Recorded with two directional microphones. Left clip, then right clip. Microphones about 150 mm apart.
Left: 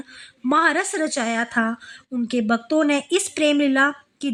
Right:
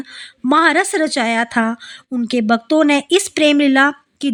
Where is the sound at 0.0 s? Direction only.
35° right (ahead or behind).